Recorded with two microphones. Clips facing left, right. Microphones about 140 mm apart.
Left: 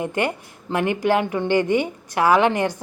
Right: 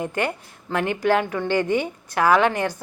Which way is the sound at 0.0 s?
15° left (ahead or behind).